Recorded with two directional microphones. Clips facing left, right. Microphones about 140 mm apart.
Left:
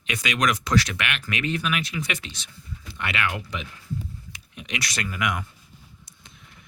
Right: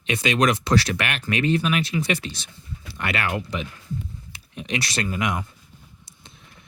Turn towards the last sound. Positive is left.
turn(degrees=-25)  # may be behind; listen again after turning